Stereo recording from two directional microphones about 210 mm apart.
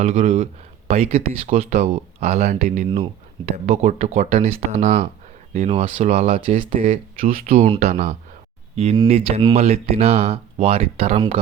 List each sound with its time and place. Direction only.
0.0 s speech: 25° right (ahead or behind)